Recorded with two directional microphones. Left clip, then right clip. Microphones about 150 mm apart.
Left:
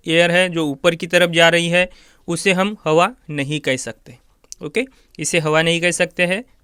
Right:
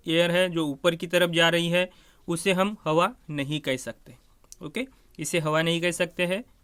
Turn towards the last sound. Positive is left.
turn(degrees=40)  # may be behind; listen again after turning